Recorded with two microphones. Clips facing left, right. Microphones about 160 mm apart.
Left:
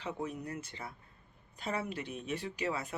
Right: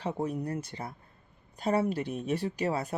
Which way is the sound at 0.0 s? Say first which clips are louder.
Right 7 dB; 40° right (ahead or behind).